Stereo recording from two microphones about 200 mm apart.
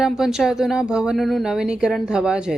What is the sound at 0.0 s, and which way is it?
A woman's voice, centre (ahead or behind).